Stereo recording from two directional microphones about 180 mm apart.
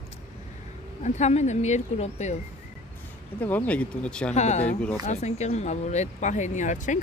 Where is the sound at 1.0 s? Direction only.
40° left (ahead or behind).